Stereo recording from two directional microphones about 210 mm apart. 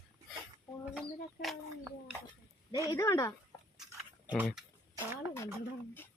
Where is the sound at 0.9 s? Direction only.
Centre (ahead or behind).